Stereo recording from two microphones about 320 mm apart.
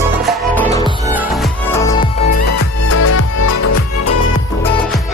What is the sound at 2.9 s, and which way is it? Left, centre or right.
Music, left.